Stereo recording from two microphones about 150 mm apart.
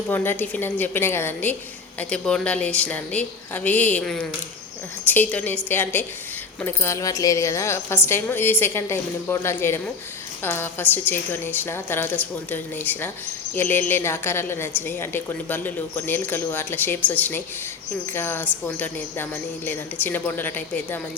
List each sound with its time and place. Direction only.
0.1 s speech: 15° left (ahead or behind)